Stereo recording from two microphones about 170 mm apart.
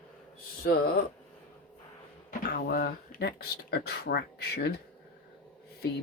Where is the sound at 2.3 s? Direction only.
60° left (ahead or behind).